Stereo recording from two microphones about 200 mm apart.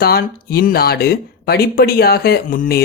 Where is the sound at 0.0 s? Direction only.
50° left (ahead or behind).